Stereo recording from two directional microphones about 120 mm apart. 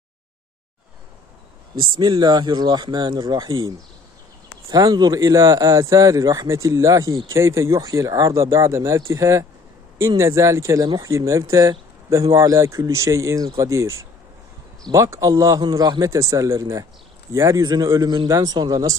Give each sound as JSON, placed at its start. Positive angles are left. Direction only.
{"t": 1.8, "sound": "speech", "side_deg": -40}